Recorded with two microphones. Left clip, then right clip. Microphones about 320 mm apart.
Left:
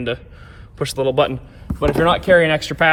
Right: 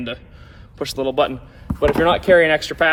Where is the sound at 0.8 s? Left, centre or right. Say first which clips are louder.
Left 2 dB; centre.